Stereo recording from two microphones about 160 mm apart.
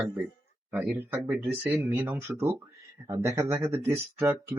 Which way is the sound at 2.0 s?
25° right (ahead or behind).